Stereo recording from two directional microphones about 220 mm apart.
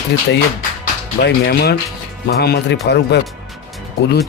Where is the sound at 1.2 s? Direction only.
45° left (ahead or behind).